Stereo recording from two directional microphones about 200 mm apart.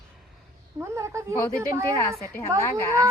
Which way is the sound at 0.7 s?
15° right (ahead or behind).